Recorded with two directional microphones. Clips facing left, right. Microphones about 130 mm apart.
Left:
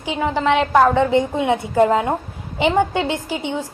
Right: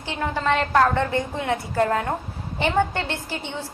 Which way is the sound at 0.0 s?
15° left (ahead or behind).